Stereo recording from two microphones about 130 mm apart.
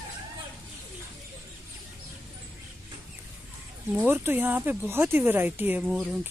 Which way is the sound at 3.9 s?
15° right (ahead or behind).